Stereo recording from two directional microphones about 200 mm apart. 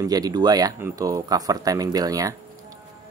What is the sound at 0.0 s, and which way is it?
Speech, 20° right (ahead or behind).